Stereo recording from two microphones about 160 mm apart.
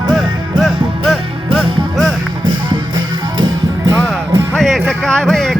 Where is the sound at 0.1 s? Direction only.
Centre (ahead or behind).